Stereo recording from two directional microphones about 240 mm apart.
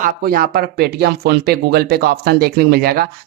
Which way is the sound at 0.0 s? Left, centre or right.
Right.